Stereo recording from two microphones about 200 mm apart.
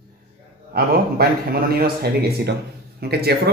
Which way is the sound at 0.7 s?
50° right (ahead or behind).